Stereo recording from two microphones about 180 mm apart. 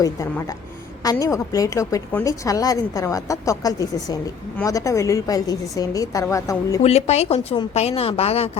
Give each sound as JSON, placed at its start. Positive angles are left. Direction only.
{"t": 0.0, "sound": "a woman's voice", "side_deg": 20}
{"t": 6.8, "sound": "a woman's voice", "side_deg": 35}